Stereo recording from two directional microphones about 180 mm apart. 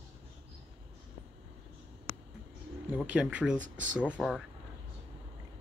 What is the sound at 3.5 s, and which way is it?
Speech, 45° right (ahead or behind).